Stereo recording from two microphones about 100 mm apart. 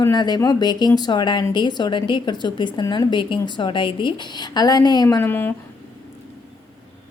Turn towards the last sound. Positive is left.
turn(degrees=20)  # may be behind; listen again after turning